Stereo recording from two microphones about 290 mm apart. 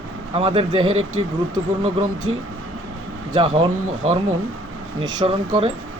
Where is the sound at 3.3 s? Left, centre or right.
Centre.